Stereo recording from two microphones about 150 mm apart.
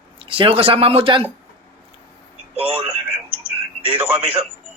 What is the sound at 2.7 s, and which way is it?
Speech, 40° right (ahead or behind).